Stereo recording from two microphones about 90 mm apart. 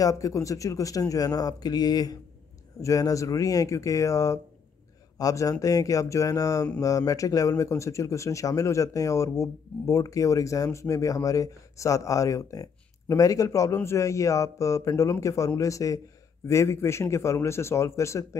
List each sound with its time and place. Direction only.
0.0 s speech: 40° left (ahead or behind)